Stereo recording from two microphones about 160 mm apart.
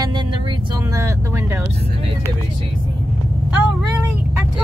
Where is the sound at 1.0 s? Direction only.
15° right (ahead or behind).